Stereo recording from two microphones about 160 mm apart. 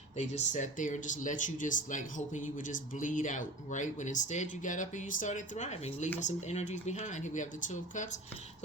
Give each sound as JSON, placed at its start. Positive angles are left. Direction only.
{"t": 0.2, "sound": "speech", "side_deg": 50}